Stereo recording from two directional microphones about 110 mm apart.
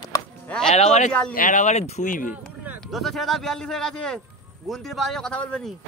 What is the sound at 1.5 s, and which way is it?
Speech, 90° left.